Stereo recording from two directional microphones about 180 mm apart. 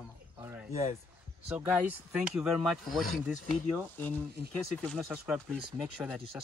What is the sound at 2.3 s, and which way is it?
Speech, centre (ahead or behind).